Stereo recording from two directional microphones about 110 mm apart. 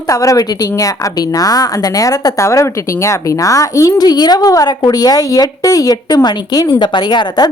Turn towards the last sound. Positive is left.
turn(degrees=40)  # may be behind; listen again after turning